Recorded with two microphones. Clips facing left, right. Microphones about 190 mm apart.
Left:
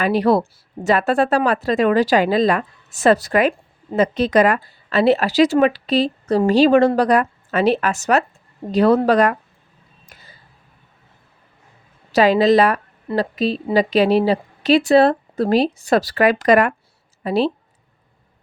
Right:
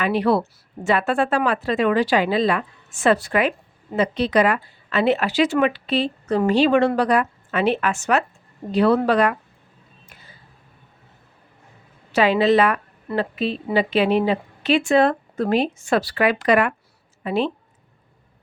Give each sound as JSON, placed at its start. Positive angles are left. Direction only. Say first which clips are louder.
{"t": 0.0, "sound": "a woman's voice", "louder": "left 3 dB", "side_deg": 40}
{"t": 12.1, "sound": "a woman's voice", "louder": "left 3 dB", "side_deg": 40}